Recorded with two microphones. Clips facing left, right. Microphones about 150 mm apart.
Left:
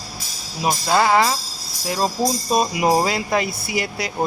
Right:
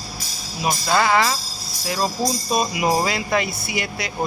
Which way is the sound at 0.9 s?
15° left (ahead or behind).